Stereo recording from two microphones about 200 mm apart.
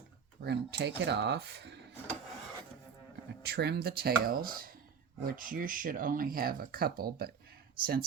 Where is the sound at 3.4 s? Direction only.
55° right (ahead or behind).